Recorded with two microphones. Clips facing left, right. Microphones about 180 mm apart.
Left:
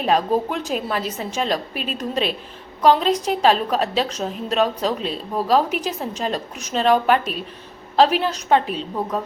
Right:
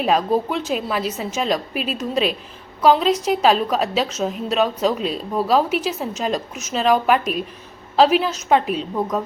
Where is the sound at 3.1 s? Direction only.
10° right (ahead or behind).